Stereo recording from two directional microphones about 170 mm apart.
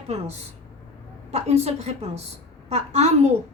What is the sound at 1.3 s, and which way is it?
A woman's voice, 40° right (ahead or behind).